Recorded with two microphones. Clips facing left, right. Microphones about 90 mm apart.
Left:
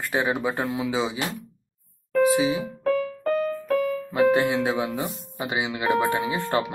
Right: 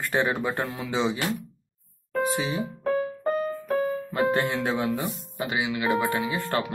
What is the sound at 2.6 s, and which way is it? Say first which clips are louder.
Music: left 2 dB; 35° right (ahead or behind).